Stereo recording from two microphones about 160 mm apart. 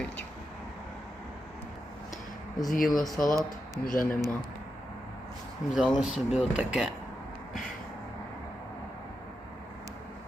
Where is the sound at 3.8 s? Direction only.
60° left (ahead or behind).